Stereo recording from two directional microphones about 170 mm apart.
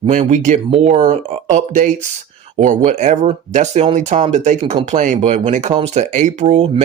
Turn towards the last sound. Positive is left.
turn(degrees=-45)  # may be behind; listen again after turning